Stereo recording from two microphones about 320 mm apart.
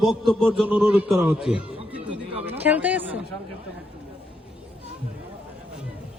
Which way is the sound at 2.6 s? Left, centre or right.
Centre.